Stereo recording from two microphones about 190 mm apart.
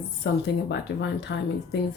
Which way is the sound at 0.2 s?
65° left (ahead or behind).